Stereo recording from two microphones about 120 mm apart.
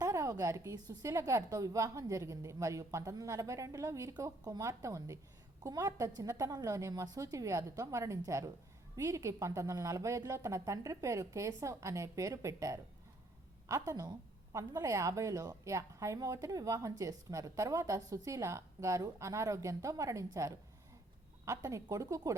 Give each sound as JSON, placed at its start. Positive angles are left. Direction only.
{"t": 0.0, "sound": "a woman's voice", "side_deg": -30}